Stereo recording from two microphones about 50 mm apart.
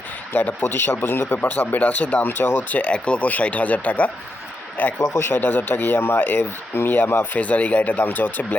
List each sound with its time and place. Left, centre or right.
0.3 s speech: left
2.2 s speech: left